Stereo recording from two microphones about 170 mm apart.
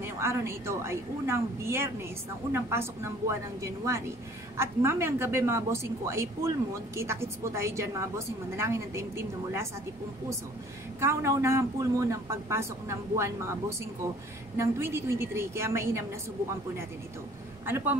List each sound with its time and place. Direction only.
0.0 s a woman's voice: 15° right (ahead or behind)
11.0 s a woman's voice: 15° right (ahead or behind)
17.6 s a woman's voice: 10° right (ahead or behind)